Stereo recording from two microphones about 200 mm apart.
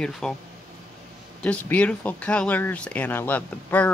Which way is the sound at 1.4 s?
5° left (ahead or behind).